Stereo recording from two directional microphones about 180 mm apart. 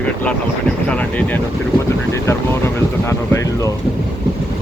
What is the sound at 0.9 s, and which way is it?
Speech, 10° left (ahead or behind).